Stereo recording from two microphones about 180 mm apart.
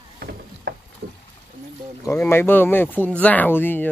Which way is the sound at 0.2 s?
65° right (ahead or behind).